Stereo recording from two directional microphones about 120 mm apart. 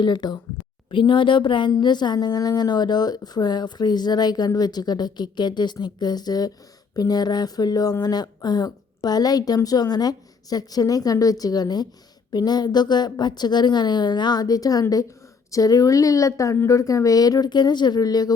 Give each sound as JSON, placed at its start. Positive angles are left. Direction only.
{"t": 0.0, "sound": "a woman's voice", "side_deg": 35}